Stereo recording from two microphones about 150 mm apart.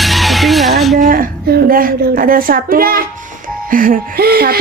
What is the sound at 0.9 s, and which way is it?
Speech, 70° right (ahead or behind).